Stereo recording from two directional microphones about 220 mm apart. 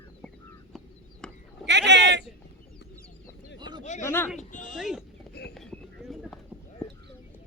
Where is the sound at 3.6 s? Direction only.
20° right (ahead or behind).